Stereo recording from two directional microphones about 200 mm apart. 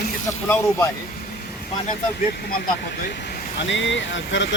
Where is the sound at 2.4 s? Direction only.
50° left (ahead or behind).